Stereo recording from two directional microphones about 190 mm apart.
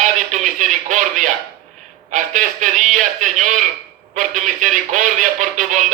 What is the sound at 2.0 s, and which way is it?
Speech, 40° right (ahead or behind).